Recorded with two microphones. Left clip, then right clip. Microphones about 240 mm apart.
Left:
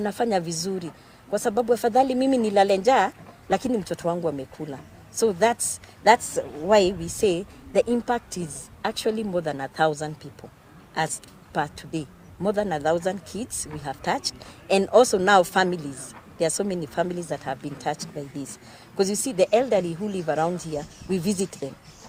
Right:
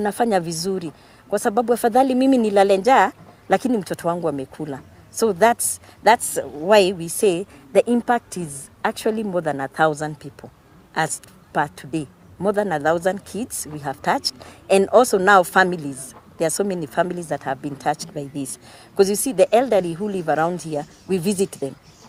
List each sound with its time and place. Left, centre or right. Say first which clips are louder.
0.0 s speech: right 5 dB; right